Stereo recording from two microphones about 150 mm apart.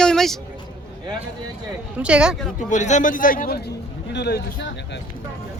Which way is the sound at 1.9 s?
5° right (ahead or behind).